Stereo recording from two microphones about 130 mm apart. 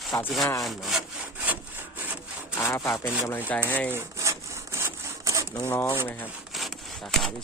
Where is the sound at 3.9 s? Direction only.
20° right (ahead or behind).